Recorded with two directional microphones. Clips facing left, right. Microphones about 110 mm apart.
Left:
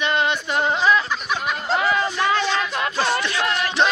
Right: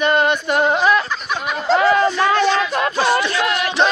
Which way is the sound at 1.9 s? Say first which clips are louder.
Right 5 dB; 55° right (ahead or behind).